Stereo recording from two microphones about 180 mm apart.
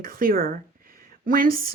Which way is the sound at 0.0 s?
55° right (ahead or behind).